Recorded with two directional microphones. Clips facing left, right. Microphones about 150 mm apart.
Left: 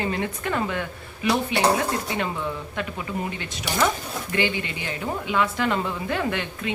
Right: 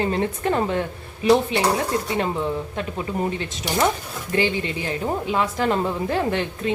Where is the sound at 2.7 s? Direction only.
30° right (ahead or behind).